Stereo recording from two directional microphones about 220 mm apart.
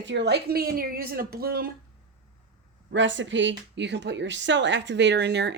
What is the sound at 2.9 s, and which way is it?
Speech, 55° right (ahead or behind).